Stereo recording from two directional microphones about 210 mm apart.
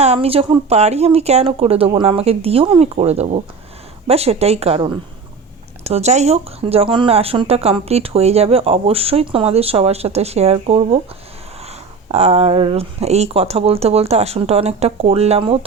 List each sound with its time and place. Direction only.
0.0 s speech: 30° right (ahead or behind)
12.0 s speech: 30° right (ahead or behind)